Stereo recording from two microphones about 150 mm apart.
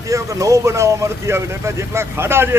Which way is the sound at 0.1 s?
20° right (ahead or behind).